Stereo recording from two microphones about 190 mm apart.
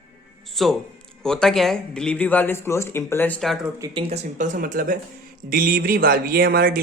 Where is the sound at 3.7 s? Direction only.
20° right (ahead or behind).